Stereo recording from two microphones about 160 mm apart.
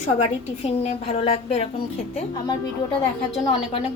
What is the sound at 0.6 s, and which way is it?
A woman's voice, 45° left (ahead or behind).